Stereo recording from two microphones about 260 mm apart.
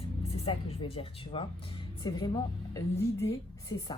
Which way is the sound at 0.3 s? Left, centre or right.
Left.